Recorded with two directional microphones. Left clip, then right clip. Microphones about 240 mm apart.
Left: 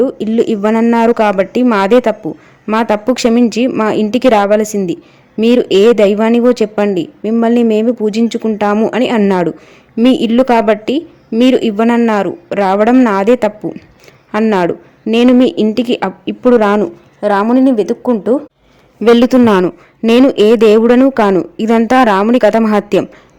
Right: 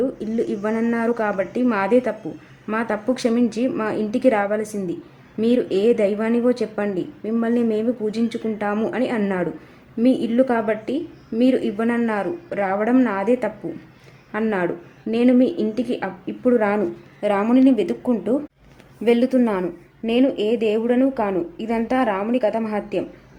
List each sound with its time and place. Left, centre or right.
0.0 s speech: left
19.0 s a man's voice: left